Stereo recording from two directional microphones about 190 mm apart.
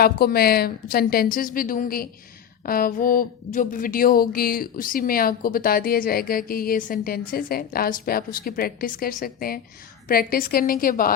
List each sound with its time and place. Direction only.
0.0 s speech: 55° left (ahead or behind)